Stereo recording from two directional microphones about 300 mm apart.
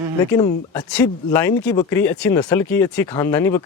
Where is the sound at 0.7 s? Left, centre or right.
Centre.